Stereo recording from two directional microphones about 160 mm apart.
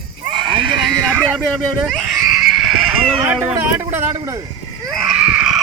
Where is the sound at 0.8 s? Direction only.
Centre (ahead or behind).